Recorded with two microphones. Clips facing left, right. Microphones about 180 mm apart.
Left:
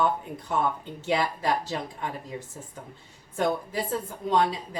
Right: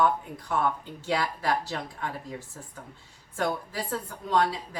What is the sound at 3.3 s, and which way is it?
Speech, 20° left (ahead or behind).